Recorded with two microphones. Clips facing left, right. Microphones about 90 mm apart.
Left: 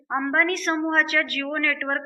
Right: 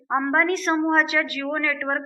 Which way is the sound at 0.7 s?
15° right (ahead or behind).